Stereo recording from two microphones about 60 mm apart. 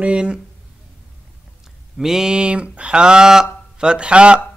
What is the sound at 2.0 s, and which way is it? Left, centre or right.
Speech, centre.